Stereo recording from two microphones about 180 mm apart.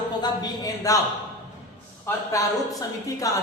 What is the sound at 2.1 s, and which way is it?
A man's voice, 20° left (ahead or behind).